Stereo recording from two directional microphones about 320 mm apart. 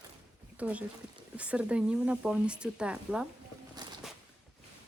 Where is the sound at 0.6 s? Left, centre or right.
Centre.